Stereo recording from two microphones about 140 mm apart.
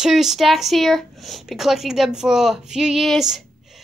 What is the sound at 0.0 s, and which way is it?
Speech, centre (ahead or behind).